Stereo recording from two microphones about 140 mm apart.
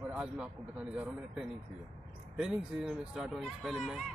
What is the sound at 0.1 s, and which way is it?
Speech, 10° right (ahead or behind).